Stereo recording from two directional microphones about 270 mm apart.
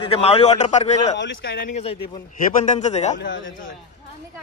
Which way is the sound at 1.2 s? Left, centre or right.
Left.